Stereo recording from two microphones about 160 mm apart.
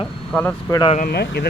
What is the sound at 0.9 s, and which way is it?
Speech, 70° left (ahead or behind).